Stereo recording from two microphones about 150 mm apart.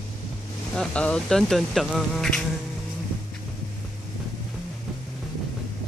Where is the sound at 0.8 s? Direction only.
5° left (ahead or behind).